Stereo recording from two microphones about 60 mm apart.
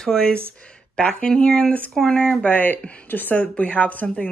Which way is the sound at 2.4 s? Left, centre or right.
Left.